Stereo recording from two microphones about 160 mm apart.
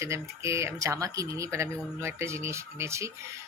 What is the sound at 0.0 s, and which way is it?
Speech, 20° right (ahead or behind).